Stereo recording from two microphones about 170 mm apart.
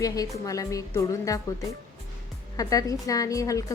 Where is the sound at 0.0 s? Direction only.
20° left (ahead or behind).